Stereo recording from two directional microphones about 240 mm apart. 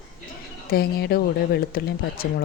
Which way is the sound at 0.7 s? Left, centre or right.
Left.